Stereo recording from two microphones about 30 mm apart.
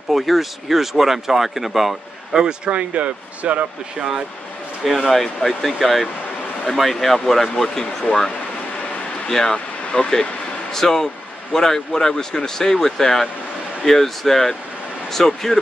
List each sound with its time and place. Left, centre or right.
0.1 s speech: centre
2.3 s a man's voice: right
2.7 s speech: right
4.8 s speech: centre
9.3 s speech: centre
9.9 s speech: left
10.7 s speech: centre